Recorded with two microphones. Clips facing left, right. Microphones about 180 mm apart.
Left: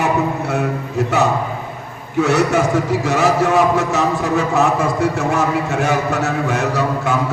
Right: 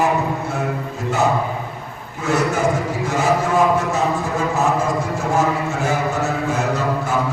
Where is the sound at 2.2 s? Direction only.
75° left (ahead or behind).